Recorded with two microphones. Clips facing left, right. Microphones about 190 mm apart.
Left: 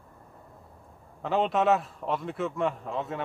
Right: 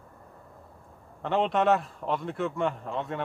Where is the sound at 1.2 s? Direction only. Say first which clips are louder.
Even; centre (ahead or behind).